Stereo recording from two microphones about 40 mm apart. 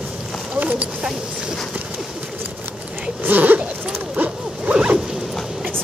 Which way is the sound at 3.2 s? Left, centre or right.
Right.